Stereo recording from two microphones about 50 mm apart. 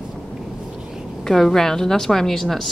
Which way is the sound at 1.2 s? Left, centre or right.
Centre.